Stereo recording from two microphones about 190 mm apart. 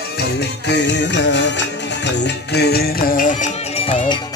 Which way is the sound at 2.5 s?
60° left (ahead or behind).